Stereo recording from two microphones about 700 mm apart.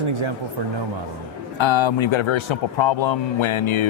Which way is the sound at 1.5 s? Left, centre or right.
Left.